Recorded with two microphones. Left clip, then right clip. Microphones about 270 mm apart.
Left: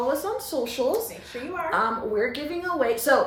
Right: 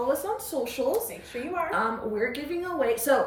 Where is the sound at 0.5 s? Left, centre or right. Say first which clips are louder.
Left 3 dB; centre.